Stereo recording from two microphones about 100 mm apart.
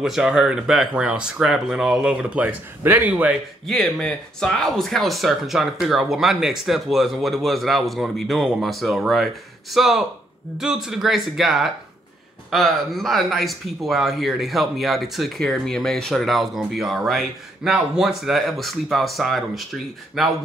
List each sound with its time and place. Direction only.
0.0 s speech: 5° right (ahead or behind)
3.6 s speech: 5° left (ahead or behind)